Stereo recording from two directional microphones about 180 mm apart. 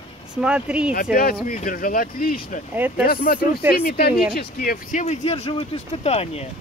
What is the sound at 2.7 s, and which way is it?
Speech, 10° right (ahead or behind).